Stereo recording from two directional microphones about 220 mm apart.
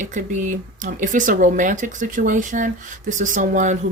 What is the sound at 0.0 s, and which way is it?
Speech, 35° right (ahead or behind).